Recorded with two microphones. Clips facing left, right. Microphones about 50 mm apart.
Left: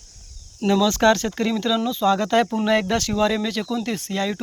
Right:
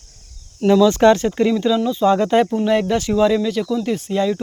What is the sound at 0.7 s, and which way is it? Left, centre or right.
Speech, centre.